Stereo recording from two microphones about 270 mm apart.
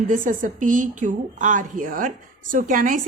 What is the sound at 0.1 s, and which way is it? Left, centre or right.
Speech, right.